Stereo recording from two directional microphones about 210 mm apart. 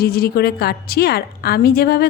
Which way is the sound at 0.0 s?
45° left (ahead or behind).